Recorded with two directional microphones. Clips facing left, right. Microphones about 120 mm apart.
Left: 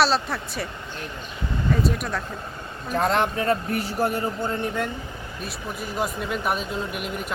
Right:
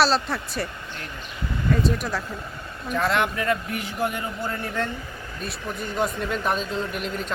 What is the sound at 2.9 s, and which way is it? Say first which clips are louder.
Speech: left 1 dB; 35° left (ahead or behind).